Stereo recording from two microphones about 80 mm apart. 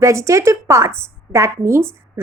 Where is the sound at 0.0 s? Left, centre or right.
Right.